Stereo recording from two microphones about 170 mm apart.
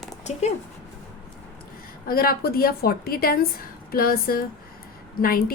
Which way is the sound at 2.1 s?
65° left (ahead or behind).